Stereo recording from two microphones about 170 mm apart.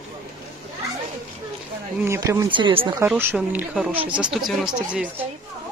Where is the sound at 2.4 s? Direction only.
30° right (ahead or behind).